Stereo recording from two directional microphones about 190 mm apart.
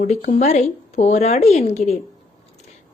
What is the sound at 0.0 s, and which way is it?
A woman's voice, 40° left (ahead or behind).